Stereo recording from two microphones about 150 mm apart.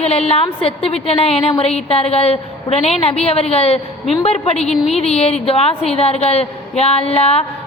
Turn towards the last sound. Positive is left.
turn(degrees=45)  # may be behind; listen again after turning